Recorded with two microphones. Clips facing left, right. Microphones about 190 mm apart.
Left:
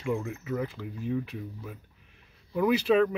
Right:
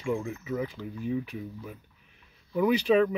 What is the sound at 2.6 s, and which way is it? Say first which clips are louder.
Speech: even; 5° left (ahead or behind).